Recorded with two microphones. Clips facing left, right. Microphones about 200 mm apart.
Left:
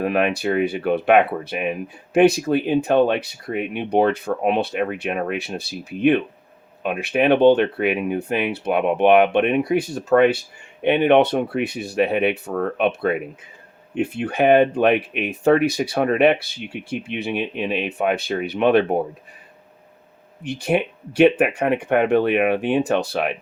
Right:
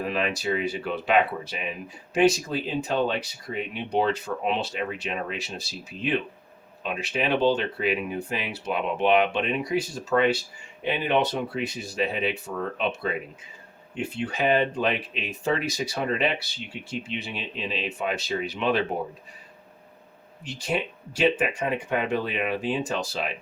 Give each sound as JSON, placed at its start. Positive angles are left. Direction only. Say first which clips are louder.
{"t": 0.0, "sound": "speech", "louder": "left 7 dB", "side_deg": 60}
{"t": 20.4, "sound": "speech", "louder": "left 8 dB", "side_deg": 60}